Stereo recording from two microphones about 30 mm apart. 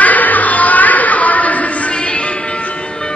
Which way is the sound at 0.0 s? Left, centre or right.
Left.